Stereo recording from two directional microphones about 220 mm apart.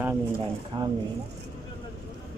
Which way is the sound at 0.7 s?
20° right (ahead or behind).